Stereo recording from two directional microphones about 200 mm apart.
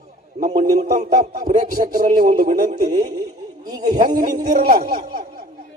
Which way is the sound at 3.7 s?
20° right (ahead or behind).